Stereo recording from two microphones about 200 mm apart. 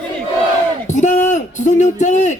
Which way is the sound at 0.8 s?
35° left (ahead or behind).